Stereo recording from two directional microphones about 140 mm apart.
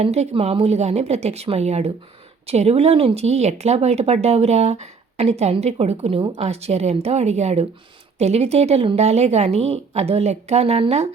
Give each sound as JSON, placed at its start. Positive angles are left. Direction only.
{"t": 0.0, "sound": "speech", "side_deg": -50}